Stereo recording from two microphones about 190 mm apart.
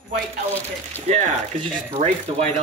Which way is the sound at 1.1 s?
35° right (ahead or behind).